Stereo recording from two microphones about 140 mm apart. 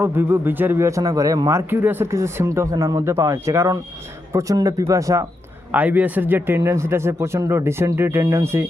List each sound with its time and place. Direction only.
0.0 s a man's voice: 15° right (ahead or behind)
5.7 s speech: 10° right (ahead or behind)